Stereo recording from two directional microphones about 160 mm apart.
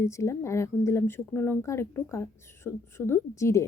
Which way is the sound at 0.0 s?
15° left (ahead or behind).